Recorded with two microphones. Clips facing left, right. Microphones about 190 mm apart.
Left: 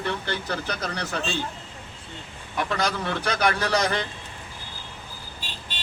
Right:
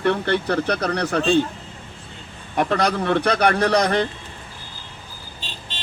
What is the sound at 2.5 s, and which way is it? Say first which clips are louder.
Speech: right 6 dB; 35° right (ahead or behind).